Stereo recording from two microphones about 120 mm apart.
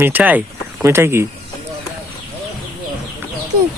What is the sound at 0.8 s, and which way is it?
Speech, 20° right (ahead or behind).